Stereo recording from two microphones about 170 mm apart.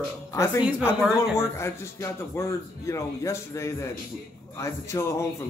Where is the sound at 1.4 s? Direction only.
15° left (ahead or behind).